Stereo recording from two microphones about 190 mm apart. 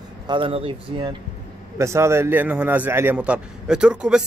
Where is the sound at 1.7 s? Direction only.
15° right (ahead or behind).